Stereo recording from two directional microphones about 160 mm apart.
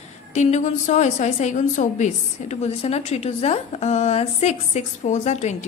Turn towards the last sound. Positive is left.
turn(degrees=45)  # may be behind; listen again after turning